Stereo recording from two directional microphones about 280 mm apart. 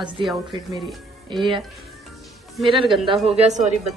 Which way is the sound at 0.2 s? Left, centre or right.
Centre.